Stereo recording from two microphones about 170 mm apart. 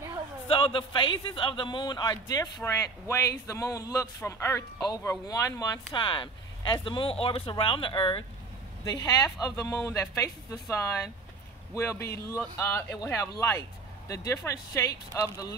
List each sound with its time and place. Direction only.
0.5 s a man's voice: 30° left (ahead or behind)